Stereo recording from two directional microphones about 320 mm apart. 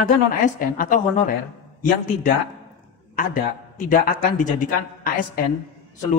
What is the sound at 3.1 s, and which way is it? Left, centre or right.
A man's voice, left.